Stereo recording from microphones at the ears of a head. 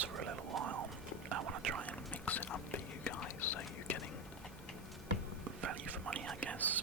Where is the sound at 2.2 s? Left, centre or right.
Left.